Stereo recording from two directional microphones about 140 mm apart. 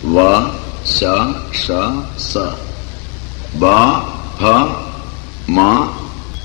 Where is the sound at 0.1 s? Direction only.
20° right (ahead or behind).